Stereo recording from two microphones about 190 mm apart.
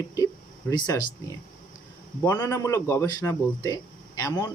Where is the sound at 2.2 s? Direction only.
20° left (ahead or behind).